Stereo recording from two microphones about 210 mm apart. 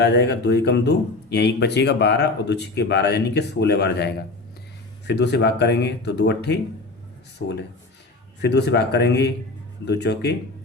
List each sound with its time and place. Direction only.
0.0 s speech: 50° left (ahead or behind)